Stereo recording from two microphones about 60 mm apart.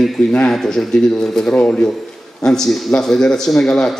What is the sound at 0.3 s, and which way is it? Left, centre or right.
A man's voice, centre.